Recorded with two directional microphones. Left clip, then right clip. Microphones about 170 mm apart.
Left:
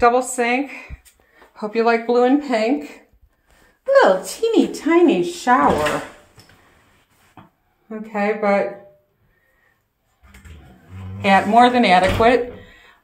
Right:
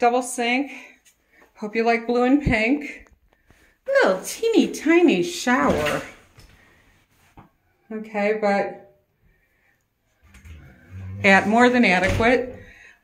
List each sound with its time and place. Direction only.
0.0 s a woman's voice: 15° right (ahead or behind); by 5.7 s 35° right (ahead or behind)
7.9 s a woman's voice: 20° right (ahead or behind)
11.1 s a man's voice: 45° right (ahead or behind)
11.5 s speech: 25° right (ahead or behind)